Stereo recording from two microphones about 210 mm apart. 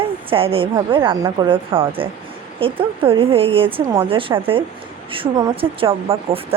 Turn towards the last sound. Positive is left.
turn(degrees=-25)  # may be behind; listen again after turning